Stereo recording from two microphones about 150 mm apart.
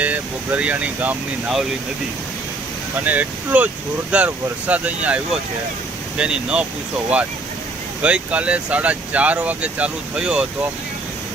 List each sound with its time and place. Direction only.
0.0 s speech: 10° right (ahead or behind)
3.1 s speech: 10° right (ahead or behind)